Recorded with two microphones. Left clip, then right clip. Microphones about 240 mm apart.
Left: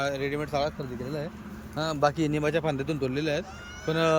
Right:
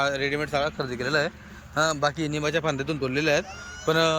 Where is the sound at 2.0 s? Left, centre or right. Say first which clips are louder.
Left 1 dB; centre.